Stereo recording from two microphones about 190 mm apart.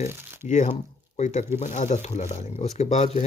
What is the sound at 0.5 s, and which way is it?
Speech, 40° left (ahead or behind).